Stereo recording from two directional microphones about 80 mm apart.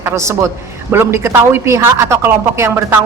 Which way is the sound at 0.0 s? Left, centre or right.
Right.